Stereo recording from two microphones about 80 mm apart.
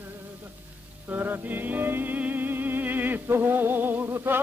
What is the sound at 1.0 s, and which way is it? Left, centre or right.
Music, right.